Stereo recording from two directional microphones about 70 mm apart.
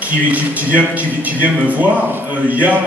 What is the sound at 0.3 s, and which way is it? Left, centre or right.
A man's voice, right.